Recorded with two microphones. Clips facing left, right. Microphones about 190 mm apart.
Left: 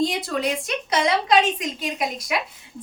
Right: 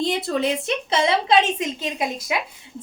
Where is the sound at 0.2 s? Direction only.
25° right (ahead or behind).